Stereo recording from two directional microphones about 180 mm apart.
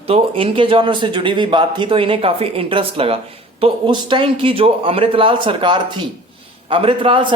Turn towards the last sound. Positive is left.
turn(degrees=-30)  # may be behind; listen again after turning